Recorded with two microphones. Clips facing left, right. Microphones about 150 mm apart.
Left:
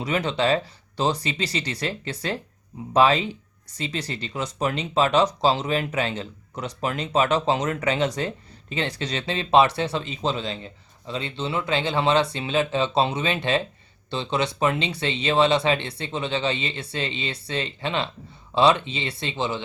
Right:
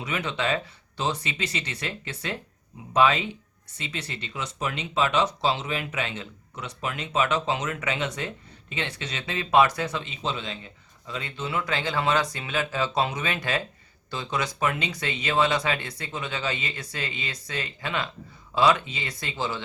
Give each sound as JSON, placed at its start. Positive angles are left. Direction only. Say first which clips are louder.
{"t": 0.0, "sound": "speech", "louder": "left 5 dB", "side_deg": 35}